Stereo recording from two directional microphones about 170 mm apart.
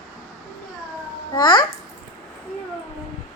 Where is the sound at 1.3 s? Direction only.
25° left (ahead or behind).